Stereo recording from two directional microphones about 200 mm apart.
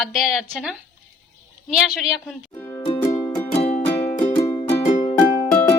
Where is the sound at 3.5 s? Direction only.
30° left (ahead or behind).